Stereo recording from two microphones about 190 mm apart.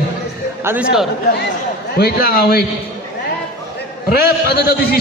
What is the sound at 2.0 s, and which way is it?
Speech, 50° left (ahead or behind).